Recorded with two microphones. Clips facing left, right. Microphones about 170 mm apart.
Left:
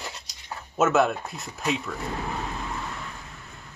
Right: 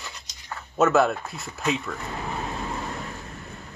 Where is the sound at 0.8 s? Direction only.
Centre (ahead or behind).